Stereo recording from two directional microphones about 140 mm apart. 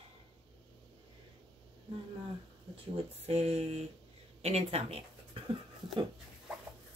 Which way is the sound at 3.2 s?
45° right (ahead or behind).